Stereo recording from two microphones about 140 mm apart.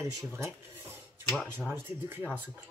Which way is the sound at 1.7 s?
15° right (ahead or behind).